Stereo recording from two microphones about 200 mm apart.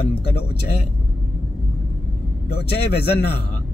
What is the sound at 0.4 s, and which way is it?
Speech, 55° left (ahead or behind).